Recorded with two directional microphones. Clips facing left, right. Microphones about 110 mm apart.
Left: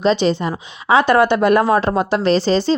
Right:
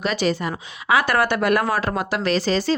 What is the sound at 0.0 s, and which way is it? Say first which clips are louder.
A woman's voice: left 6 dB; 25° left (ahead or behind).